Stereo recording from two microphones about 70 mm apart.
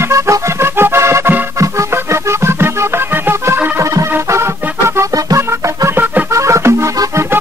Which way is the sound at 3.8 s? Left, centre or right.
Right.